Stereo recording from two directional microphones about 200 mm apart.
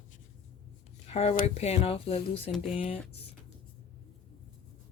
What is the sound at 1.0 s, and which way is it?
Speech, 30° left (ahead or behind).